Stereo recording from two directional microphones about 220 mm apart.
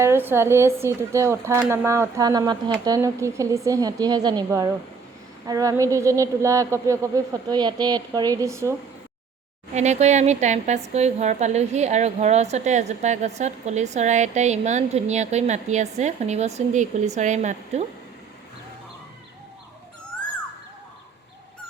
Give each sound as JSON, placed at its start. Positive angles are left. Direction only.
{"t": 0.0, "sound": "speech", "side_deg": -10}
{"t": 9.7, "sound": "a woman's voice", "side_deg": -30}